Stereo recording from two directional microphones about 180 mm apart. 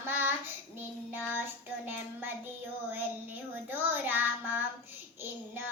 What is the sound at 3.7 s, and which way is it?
Child singing, 10° right (ahead or behind).